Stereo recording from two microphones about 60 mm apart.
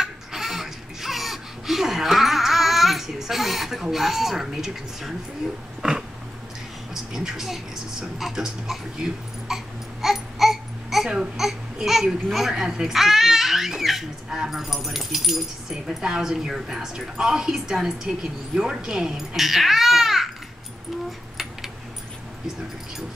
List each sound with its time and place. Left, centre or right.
0.0 s a sound: centre
5.8 s dog: centre
6.9 s speech: centre